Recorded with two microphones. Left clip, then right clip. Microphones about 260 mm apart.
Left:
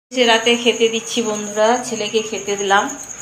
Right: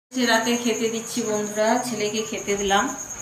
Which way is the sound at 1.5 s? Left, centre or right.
Centre.